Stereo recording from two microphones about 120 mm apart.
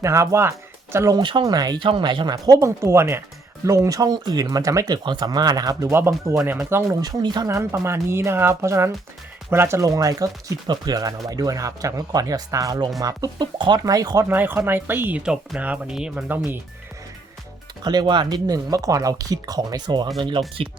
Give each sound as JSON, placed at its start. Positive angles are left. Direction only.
{"t": 0.0, "sound": "speech", "side_deg": -25}
{"t": 1.2, "sound": "speech", "side_deg": -40}
{"t": 2.3, "sound": "speech", "side_deg": -25}
{"t": 5.9, "sound": "speech", "side_deg": -20}
{"t": 7.0, "sound": "speech", "side_deg": -35}
{"t": 7.4, "sound": "speech", "side_deg": -20}
{"t": 14.3, "sound": "speech", "side_deg": -15}
{"t": 17.8, "sound": "speech", "side_deg": -40}